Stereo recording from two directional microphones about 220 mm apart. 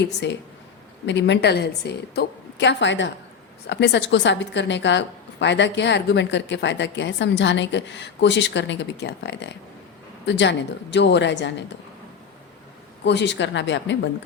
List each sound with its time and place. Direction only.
0.0 s a woman's voice: 55° left (ahead or behind)
13.1 s a woman's voice: 50° left (ahead or behind)